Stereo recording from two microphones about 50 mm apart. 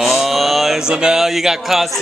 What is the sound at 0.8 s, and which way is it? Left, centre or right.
Speech, centre.